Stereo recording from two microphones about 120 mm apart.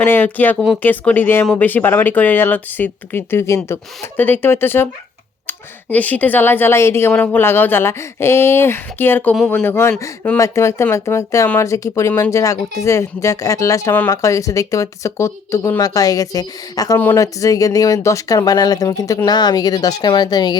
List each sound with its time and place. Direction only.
0.0 s speech: 15° left (ahead or behind); by 20.6 s 35° left (ahead or behind)